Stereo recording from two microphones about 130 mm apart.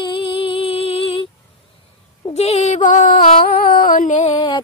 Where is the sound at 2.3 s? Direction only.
60° left (ahead or behind); by 4.3 s 75° left (ahead or behind).